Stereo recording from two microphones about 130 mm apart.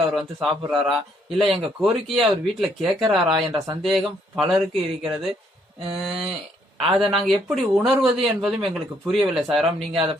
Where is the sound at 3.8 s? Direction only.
Centre (ahead or behind).